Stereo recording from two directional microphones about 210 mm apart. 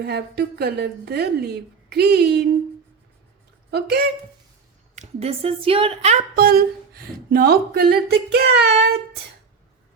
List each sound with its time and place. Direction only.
0.0 s speech: 50° right (ahead or behind)
3.7 s speech: 50° right (ahead or behind)
4.9 s speech: 30° right (ahead or behind); by 9.0 s 50° right (ahead or behind)